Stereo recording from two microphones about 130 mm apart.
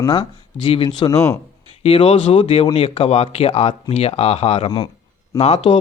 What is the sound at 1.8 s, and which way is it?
Speech, 50° left (ahead or behind).